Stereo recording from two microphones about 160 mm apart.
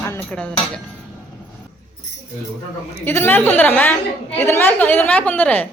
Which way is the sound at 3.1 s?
15° left (ahead or behind).